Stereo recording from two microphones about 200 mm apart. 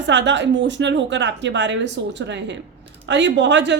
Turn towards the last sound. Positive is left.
turn(degrees=-60)  # may be behind; listen again after turning